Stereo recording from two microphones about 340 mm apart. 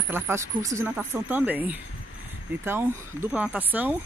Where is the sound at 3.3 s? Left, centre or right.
Centre.